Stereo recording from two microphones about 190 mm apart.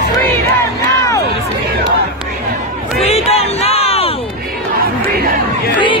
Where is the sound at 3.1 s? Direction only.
35° left (ahead or behind).